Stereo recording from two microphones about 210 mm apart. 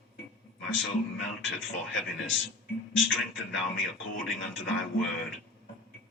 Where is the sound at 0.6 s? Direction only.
65° left (ahead or behind).